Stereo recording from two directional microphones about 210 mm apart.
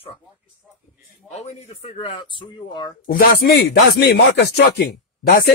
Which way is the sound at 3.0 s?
45° left (ahead or behind).